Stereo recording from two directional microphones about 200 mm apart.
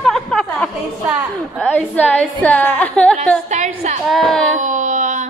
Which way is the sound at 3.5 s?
35° right (ahead or behind).